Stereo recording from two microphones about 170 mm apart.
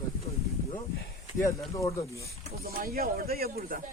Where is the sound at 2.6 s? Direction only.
60° right (ahead or behind).